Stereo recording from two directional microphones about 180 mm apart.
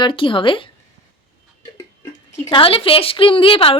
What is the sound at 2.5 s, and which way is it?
A woman's voice, 30° left (ahead or behind).